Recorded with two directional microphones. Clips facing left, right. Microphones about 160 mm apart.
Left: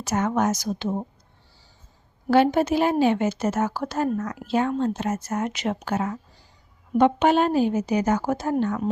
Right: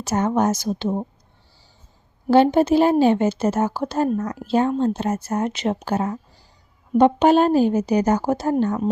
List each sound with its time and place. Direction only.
0.0 s a woman's voice: 30° right (ahead or behind)
2.2 s a woman's voice: 30° right (ahead or behind)